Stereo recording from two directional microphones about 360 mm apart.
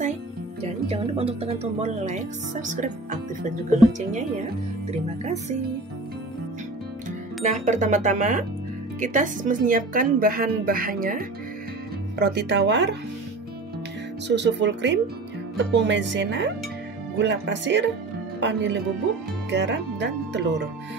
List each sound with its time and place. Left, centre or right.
0.7 s a woman's voice: centre
4.9 s a woman's voice: centre
7.4 s a woman's voice: right
14.2 s a woman's voice: right